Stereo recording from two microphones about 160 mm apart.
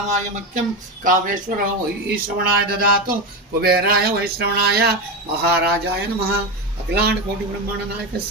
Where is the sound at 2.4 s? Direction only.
70° right (ahead or behind).